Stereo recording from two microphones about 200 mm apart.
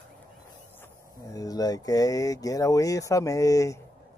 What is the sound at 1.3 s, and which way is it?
Speech, 20° left (ahead or behind).